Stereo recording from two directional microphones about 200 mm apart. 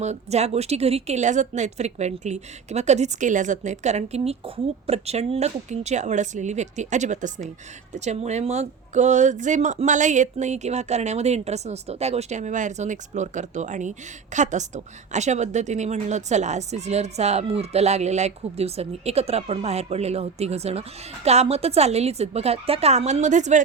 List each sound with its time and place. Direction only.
0.0 s speech: 35° right (ahead or behind)